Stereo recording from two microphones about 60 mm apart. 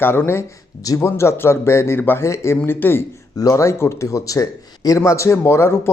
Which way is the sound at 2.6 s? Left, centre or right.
Left.